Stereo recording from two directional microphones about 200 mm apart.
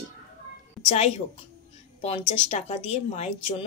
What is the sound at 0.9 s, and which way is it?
Speech, 30° left (ahead or behind).